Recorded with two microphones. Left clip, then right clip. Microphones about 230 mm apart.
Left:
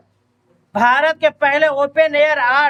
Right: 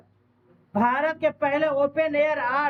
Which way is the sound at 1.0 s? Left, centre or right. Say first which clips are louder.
Left 9 dB; centre.